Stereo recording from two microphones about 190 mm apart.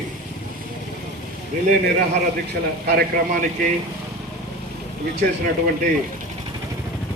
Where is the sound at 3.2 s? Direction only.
45° right (ahead or behind).